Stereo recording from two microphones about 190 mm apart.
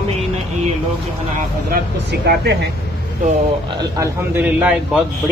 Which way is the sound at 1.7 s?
60° right (ahead or behind).